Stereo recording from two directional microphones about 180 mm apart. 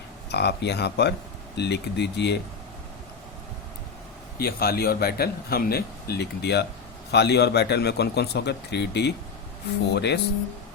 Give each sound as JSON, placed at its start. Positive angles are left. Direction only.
{"t": 0.3, "sound": "speech", "side_deg": 70}
{"t": 4.4, "sound": "speech", "side_deg": 60}